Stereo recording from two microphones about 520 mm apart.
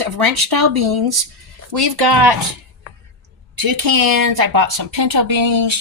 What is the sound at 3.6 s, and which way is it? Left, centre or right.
Speech, right.